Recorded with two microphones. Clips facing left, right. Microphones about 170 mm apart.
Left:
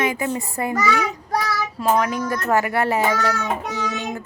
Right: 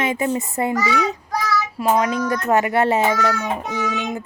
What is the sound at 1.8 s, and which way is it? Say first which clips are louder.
A child's voice: right 1 dB; 20° right (ahead or behind).